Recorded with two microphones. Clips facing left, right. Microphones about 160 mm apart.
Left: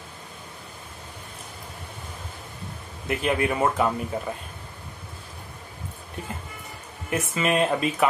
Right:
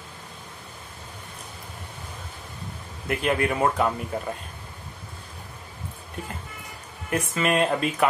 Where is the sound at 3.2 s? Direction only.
5° left (ahead or behind).